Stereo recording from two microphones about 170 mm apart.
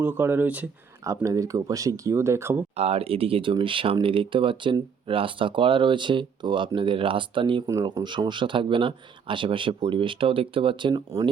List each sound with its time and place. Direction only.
0.0 s speech: 10° right (ahead or behind)
2.7 s speech: 35° right (ahead or behind)
7.7 s speech: 20° right (ahead or behind)